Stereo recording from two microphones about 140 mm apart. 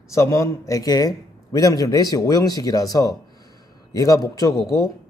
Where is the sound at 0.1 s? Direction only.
20° left (ahead or behind).